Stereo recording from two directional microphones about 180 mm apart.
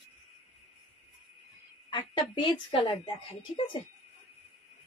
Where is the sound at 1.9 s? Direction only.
25° left (ahead or behind).